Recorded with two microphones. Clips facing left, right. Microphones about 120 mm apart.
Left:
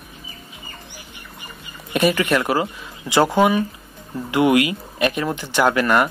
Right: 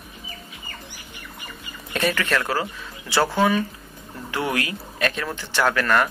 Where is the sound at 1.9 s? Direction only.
15° left (ahead or behind).